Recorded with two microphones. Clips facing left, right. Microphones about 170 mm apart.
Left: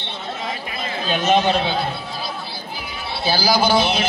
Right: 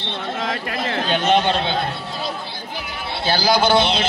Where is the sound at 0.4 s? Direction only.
80° right.